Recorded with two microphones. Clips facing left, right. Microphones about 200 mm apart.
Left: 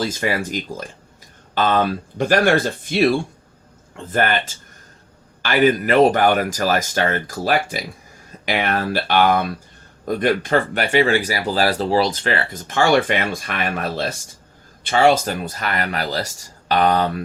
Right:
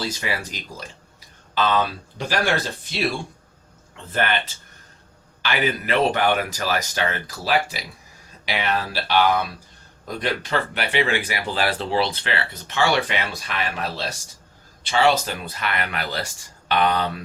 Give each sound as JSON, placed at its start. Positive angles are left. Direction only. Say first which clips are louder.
{"t": 0.0, "sound": "speech", "louder": "left 6 dB", "side_deg": 50}